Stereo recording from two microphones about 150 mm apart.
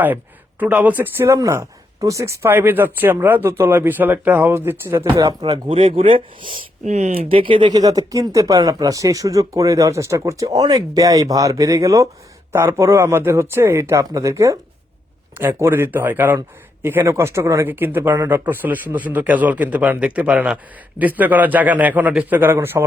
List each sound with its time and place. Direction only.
0.6 s speech: 10° right (ahead or behind)
5.6 s speech: 40° right (ahead or behind); by 22.8 s 15° right (ahead or behind)